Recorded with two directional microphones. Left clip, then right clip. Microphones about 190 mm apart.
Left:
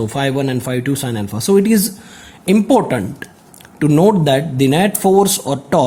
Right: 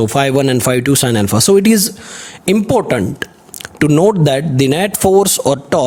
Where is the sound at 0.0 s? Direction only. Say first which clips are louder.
Right 6 dB; 40° right (ahead or behind).